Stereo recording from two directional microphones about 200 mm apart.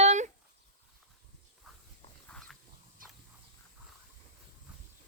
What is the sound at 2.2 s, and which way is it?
Dog, 5° left (ahead or behind).